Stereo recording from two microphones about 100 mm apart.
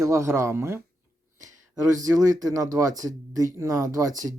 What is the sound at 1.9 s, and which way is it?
Speech, 35° right (ahead or behind).